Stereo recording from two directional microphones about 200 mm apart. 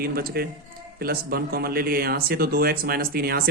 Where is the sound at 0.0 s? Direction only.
50° right (ahead or behind).